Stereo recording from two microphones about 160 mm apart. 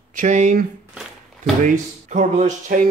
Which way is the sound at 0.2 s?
50° right (ahead or behind).